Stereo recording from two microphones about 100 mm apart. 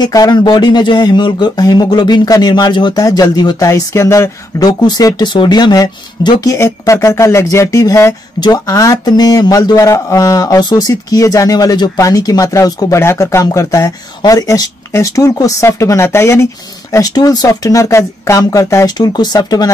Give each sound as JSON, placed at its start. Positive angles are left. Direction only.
{"t": 0.0, "sound": "speech", "side_deg": 40}
{"t": 16.9, "sound": "speech", "side_deg": 40}
{"t": 18.9, "sound": "speech", "side_deg": 45}